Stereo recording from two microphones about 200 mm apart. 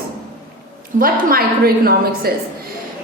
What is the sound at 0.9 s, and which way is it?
A woman's voice, 45° right (ahead or behind).